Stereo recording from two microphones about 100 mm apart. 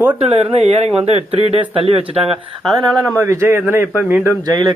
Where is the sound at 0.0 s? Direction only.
15° right (ahead or behind).